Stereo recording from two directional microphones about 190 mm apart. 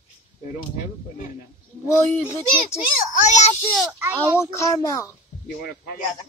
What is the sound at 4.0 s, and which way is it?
Speech, 15° right (ahead or behind).